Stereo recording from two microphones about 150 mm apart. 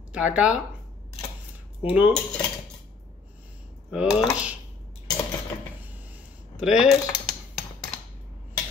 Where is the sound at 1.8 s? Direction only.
10° right (ahead or behind).